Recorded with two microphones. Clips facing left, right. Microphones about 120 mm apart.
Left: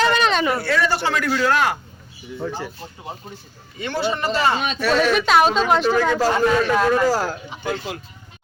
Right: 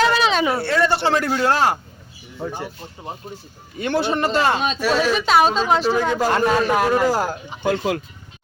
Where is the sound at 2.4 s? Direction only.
20° right (ahead or behind).